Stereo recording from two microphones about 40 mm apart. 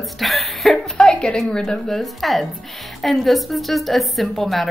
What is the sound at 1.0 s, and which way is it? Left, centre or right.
A woman's voice, centre.